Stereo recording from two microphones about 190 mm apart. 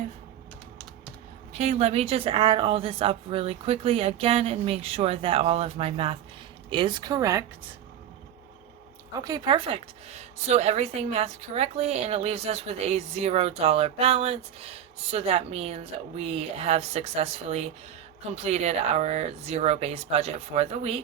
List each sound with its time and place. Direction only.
1.5 s a woman's voice: 35° right (ahead or behind); by 7.4 s 15° right (ahead or behind)
9.2 s a woman's voice: 20° right (ahead or behind)